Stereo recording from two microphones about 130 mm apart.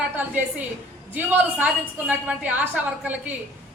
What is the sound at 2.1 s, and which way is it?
A woman's voice, 10° right (ahead or behind).